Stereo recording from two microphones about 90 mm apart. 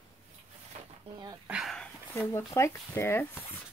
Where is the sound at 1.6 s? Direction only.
5° left (ahead or behind).